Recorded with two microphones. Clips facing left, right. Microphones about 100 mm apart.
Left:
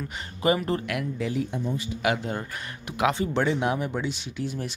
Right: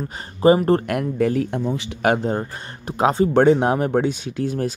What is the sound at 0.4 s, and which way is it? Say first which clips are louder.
Speech: right 9 dB; 35° right (ahead or behind).